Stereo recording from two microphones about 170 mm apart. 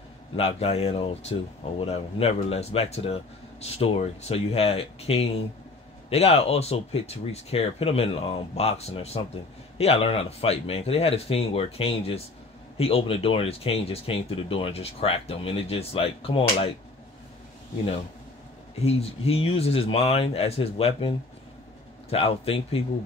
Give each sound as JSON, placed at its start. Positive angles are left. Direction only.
{"t": 0.4, "sound": "speech", "side_deg": 35}
{"t": 18.8, "sound": "speech", "side_deg": 35}
{"t": 22.1, "sound": "speech", "side_deg": 35}